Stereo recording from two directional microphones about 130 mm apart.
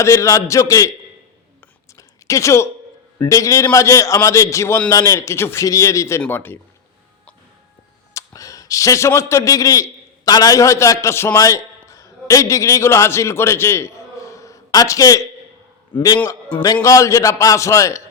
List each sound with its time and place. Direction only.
0.0 s a man's voice: 25° left (ahead or behind)
2.0 s a sound: 25° left (ahead or behind)
3.2 s a man's voice: 25° left (ahead or behind)
8.1 s a man's voice: 25° left (ahead or behind)
15.9 s a man's voice: 35° left (ahead or behind)